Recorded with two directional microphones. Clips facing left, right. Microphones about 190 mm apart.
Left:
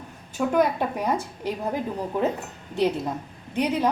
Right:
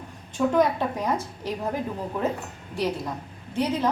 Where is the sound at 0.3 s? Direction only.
10° left (ahead or behind).